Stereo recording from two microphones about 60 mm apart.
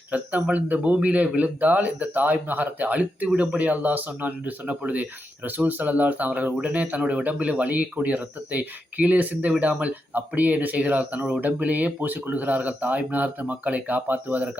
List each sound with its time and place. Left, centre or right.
0.1 s speech: right